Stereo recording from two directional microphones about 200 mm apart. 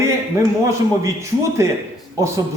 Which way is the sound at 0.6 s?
15° right (ahead or behind).